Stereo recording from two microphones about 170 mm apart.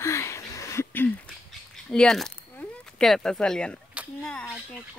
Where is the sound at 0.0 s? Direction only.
15° left (ahead or behind).